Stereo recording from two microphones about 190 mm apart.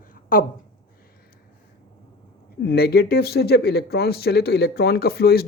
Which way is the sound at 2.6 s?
55° left (ahead or behind).